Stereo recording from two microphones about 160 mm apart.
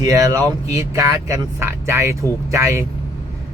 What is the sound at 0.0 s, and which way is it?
Speech, 20° right (ahead or behind).